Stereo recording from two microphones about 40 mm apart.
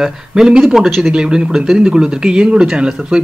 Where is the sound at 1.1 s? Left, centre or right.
Right.